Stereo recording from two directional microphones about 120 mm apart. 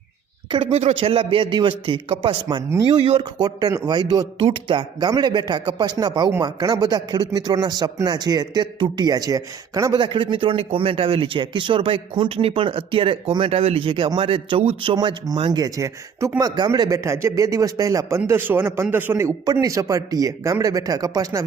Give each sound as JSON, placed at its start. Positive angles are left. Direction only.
{"t": 0.8, "sound": "speech", "side_deg": -60}
{"t": 2.6, "sound": "a man's voice", "side_deg": -25}
{"t": 4.4, "sound": "speech", "side_deg": -45}
{"t": 10.0, "sound": "speech", "side_deg": -40}
{"t": 14.9, "sound": "a man's voice", "side_deg": -35}
{"t": 18.3, "sound": "a man's voice", "side_deg": -15}